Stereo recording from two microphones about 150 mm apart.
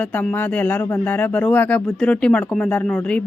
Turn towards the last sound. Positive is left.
turn(degrees=5)  # may be behind; listen again after turning